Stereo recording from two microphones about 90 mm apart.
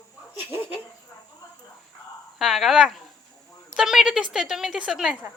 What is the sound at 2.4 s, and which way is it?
A woman's voice, centre (ahead or behind).